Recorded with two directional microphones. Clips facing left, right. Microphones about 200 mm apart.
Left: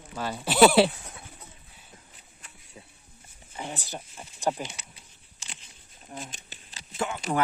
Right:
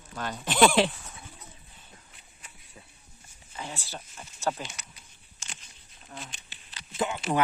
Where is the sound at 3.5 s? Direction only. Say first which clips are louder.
Left 3 dB; 20° left (ahead or behind).